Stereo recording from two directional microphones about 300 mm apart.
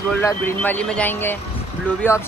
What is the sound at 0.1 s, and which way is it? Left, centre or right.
Speech, centre.